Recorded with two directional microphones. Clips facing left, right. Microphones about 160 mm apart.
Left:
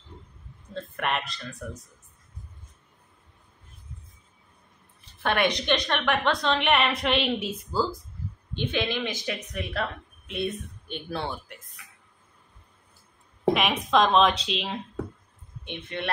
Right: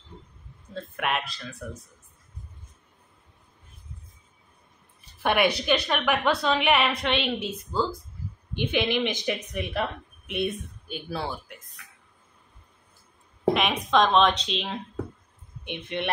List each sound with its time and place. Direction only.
0.7 s speech: 5° right (ahead or behind)
5.2 s a woman's voice: 10° right (ahead or behind)
8.5 s speech: 15° right (ahead or behind)
10.9 s speech: 5° right (ahead or behind)
13.5 s a woman's voice: centre (ahead or behind)
15.6 s speech: 15° right (ahead or behind)